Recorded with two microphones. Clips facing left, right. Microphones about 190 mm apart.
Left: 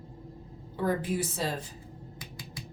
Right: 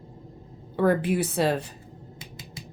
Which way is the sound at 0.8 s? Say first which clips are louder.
Right 7 dB; 65° right (ahead or behind).